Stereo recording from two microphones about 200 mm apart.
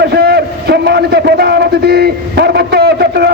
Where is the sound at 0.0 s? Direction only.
55° right (ahead or behind).